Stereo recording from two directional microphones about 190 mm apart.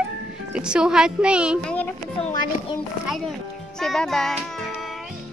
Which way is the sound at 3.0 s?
Centre (ahead or behind).